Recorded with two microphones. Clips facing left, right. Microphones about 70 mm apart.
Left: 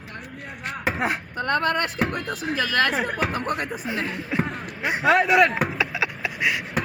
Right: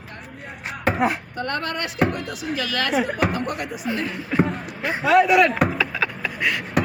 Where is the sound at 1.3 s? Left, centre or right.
Left.